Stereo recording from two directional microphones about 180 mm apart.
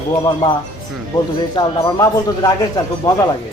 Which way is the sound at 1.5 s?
25° left (ahead or behind).